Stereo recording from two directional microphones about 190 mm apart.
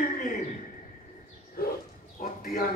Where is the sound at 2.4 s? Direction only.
50° left (ahead or behind).